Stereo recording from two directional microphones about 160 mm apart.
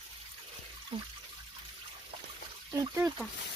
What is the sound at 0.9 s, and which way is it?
Water, 35° right (ahead or behind).